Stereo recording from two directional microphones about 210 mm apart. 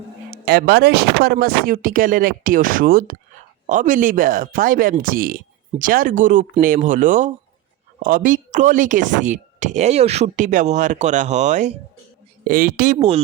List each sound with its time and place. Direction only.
0.4 s speech: 50° right (ahead or behind); by 13.2 s 30° right (ahead or behind)